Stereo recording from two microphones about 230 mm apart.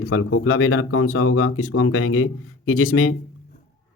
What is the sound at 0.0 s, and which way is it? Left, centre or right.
Speech, left.